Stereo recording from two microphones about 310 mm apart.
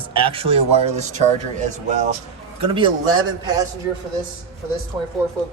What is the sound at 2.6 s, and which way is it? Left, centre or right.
Speech, centre.